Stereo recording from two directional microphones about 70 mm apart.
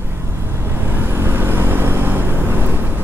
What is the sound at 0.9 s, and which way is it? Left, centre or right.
Vehicle, right.